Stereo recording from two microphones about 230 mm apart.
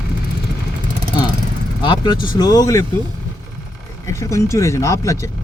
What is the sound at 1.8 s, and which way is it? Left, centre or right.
Speech, centre.